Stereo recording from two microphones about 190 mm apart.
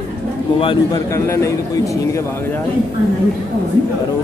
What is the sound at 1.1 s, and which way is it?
Speech, 15° left (ahead or behind).